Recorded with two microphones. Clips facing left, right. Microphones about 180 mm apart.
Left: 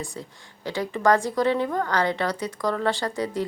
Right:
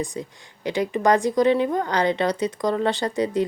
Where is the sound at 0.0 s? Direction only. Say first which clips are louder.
Right 6 dB; 15° right (ahead or behind).